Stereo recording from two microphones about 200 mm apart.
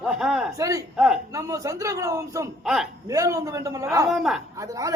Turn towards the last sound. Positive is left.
turn(degrees=-15)  # may be behind; listen again after turning